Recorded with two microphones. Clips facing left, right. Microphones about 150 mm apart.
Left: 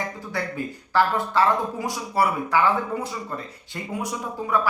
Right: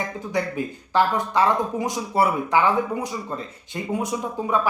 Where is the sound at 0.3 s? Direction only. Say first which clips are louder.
Right 6 dB; 20° right (ahead or behind).